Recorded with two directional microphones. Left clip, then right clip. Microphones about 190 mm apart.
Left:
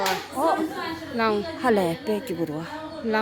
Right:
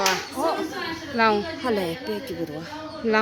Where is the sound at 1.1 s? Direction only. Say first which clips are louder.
Right 4 dB; 5° right (ahead or behind).